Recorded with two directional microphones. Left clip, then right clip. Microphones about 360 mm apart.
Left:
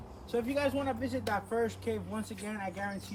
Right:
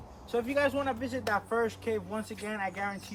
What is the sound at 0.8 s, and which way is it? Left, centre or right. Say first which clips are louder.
Speech: right 2 dB; centre.